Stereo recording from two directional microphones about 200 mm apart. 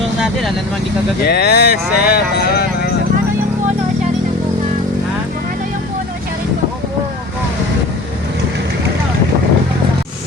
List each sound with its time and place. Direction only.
1.2 s speech: 50° left (ahead or behind)